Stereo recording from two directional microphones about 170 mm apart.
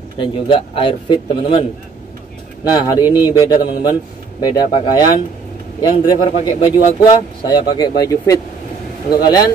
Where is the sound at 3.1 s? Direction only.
25° left (ahead or behind).